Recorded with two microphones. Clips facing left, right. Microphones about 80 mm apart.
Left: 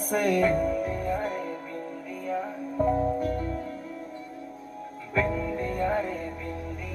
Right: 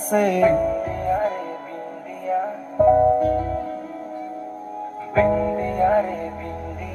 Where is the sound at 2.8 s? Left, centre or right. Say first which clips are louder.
Right 11 dB; right.